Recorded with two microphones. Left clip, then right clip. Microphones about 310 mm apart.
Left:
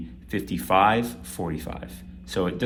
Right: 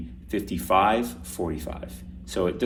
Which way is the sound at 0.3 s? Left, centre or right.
Left.